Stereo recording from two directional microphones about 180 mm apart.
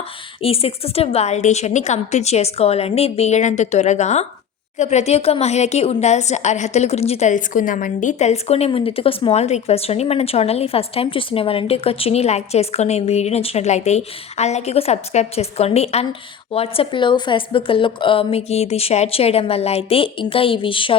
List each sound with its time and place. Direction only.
0.4 s a woman's voice: 35° left (ahead or behind)